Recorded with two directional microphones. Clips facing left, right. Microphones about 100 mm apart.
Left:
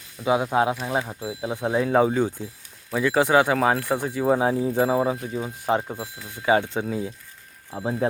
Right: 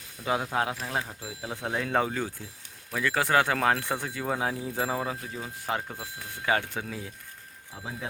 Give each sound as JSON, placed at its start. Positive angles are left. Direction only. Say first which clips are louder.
{"t": 0.3, "sound": "speech", "louder": "left 7 dB", "side_deg": 15}
{"t": 7.7, "sound": "speech", "louder": "left 12 dB", "side_deg": 40}